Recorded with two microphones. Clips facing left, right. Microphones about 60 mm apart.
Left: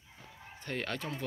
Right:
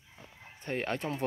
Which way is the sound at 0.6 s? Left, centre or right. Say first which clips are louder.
Right 4 dB; right.